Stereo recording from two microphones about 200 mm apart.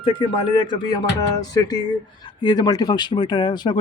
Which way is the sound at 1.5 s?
20° left (ahead or behind).